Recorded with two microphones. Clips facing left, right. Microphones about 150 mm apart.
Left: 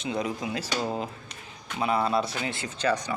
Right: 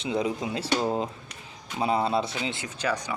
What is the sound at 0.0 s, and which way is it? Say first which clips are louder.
Speech: right 2 dB; 30° right (ahead or behind).